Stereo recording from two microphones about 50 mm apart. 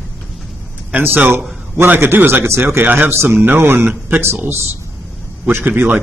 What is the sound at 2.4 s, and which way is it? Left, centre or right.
Speech, right.